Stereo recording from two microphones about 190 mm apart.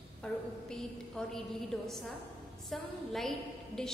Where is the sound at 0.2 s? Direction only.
5° left (ahead or behind).